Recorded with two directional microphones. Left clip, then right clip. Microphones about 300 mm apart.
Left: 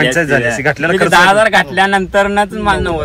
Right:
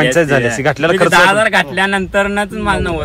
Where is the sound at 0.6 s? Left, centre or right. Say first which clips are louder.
Even; right.